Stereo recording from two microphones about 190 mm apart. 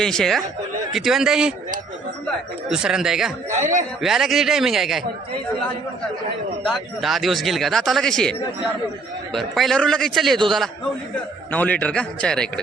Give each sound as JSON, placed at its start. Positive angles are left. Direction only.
{"t": 0.0, "sound": "speech", "side_deg": 0}
{"t": 2.6, "sound": "speech", "side_deg": -5}
{"t": 3.5, "sound": "speech", "side_deg": -40}
{"t": 4.0, "sound": "speech", "side_deg": 0}
{"t": 6.7, "sound": "speech", "side_deg": 0}
{"t": 11.5, "sound": "a man's voice", "side_deg": 10}